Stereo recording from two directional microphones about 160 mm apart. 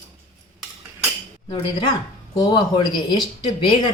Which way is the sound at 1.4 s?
25° left (ahead or behind).